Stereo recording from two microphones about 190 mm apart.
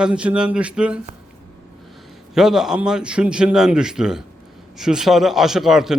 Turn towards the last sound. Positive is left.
turn(degrees=0)  # may be behind; listen again after turning